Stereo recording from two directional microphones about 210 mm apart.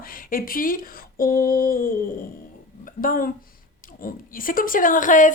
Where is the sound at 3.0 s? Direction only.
40° left (ahead or behind).